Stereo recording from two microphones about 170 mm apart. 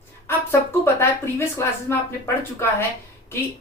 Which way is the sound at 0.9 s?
15° left (ahead or behind).